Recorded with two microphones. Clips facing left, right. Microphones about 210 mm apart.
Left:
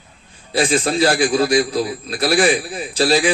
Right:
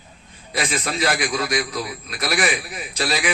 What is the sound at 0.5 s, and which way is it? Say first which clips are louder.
A man's voice: left 8 dB; 30° left (ahead or behind).